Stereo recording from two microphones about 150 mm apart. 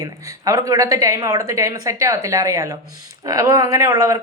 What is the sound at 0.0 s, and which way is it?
Speech, 20° right (ahead or behind).